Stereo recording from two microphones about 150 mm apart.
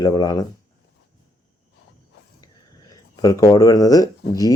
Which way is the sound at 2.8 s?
25° left (ahead or behind).